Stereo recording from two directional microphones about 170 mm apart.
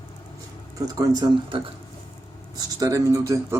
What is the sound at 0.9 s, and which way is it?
Speech, 25° right (ahead or behind).